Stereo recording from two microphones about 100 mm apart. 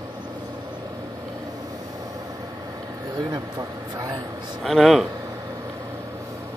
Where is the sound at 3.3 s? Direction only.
40° right (ahead or behind).